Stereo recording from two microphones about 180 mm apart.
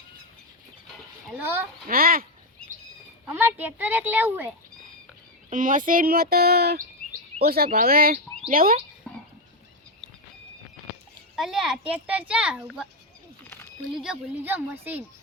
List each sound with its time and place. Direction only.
1.3 s speech: 10° right (ahead or behind)
1.9 s speech: 55° right (ahead or behind)
3.3 s speech: 10° right (ahead or behind)
5.5 s speech: 45° right (ahead or behind)
11.3 s a child's voice: centre (ahead or behind)
13.9 s speech: 5° right (ahead or behind)